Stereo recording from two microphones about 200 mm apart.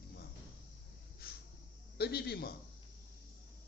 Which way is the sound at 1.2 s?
50° left (ahead or behind).